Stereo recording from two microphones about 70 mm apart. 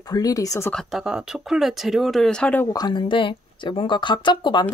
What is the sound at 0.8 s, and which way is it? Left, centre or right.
Speech, centre.